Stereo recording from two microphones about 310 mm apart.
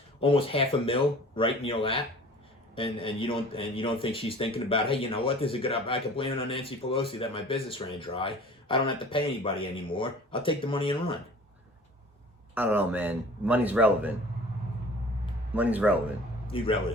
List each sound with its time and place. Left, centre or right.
0.2 s a man's voice: centre
12.5 s a man's voice: centre
15.5 s a man's voice: centre
16.5 s a man's voice: centre